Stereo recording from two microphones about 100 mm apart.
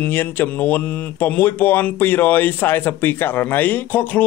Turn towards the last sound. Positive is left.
turn(degrees=20)  # may be behind; listen again after turning